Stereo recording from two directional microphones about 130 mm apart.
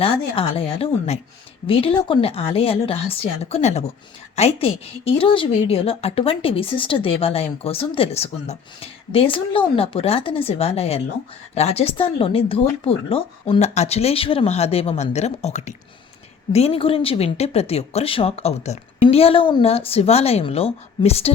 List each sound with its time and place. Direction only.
0.0 s a woman's voice: 45° left (ahead or behind)